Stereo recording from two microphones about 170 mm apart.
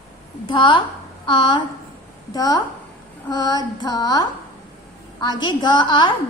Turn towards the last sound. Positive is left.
turn(degrees=25)  # may be behind; listen again after turning